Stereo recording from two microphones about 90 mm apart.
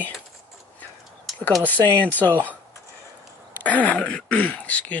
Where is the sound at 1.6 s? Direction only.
20° left (ahead or behind).